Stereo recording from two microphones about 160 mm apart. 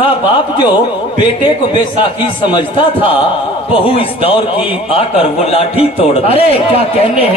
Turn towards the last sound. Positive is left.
turn(degrees=35)  # may be behind; listen again after turning